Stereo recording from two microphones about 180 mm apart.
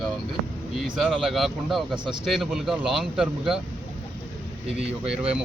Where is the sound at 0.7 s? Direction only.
Centre (ahead or behind).